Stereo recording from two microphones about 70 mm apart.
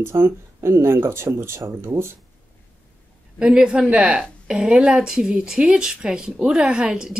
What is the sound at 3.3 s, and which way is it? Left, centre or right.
Speech, centre.